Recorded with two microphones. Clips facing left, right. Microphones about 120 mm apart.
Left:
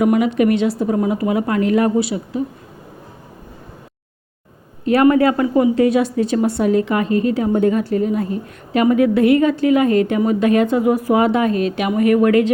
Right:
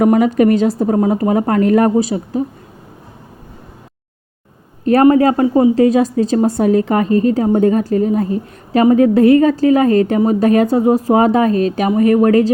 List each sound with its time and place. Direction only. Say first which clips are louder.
0.0 s a woman's voice: right 4 dB; 40° right (ahead or behind)
4.9 s a woman's voice: right 3 dB; 35° right (ahead or behind)